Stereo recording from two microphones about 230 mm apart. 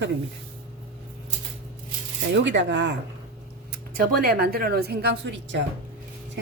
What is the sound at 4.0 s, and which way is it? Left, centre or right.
A woman's voice, right.